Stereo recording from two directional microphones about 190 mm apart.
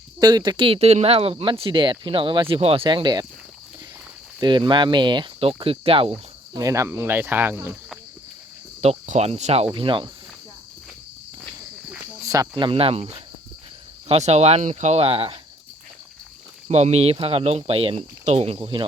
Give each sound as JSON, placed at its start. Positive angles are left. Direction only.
{"t": 0.2, "sound": "speech", "side_deg": -20}
{"t": 4.4, "sound": "speech", "side_deg": -25}
{"t": 8.8, "sound": "speech", "side_deg": -35}
{"t": 12.2, "sound": "speech", "side_deg": -20}
{"t": 16.6, "sound": "speech", "side_deg": -35}